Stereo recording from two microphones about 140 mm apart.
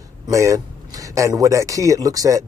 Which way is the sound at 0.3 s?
20° right (ahead or behind).